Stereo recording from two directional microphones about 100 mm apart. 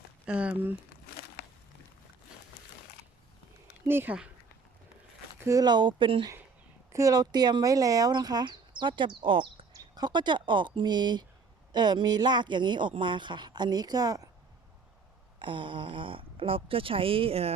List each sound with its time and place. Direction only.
0.3 s speech: 10° right (ahead or behind)
3.8 s speech: 20° right (ahead or behind)
5.4 s speech: 30° right (ahead or behind)
5.6 s speech: 50° right (ahead or behind)
6.9 s speech: 35° right (ahead or behind); by 9.6 s 60° right (ahead or behind)
9.7 s speech: 45° right (ahead or behind)
15.4 s speech: 55° right (ahead or behind); by 17.5 s 75° right (ahead or behind)